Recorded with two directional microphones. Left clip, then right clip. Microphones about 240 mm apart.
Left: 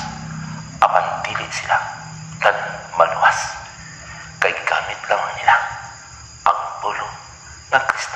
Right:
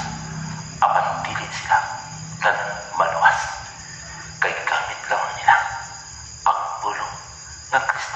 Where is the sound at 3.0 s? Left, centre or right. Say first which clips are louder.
Left 2 dB; left.